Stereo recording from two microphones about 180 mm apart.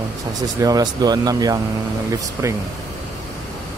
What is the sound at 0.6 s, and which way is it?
Speech, 20° right (ahead or behind).